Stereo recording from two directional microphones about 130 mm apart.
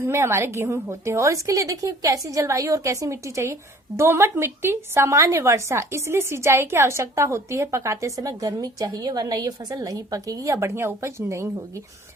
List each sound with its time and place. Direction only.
0.0 s a woman's voice: 20° right (ahead or behind)